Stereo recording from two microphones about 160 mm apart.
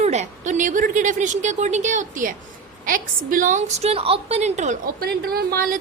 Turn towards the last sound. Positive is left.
turn(degrees=-65)  # may be behind; listen again after turning